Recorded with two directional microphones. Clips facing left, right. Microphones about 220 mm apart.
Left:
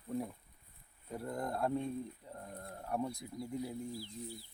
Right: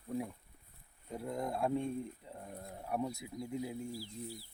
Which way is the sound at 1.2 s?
Centre (ahead or behind).